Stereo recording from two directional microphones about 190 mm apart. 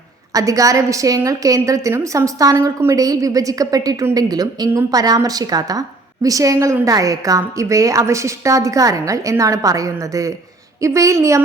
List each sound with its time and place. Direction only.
0.3 s a woman's voice: 15° right (ahead or behind)